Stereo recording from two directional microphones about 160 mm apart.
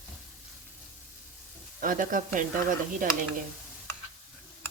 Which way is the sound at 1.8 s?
60° right (ahead or behind).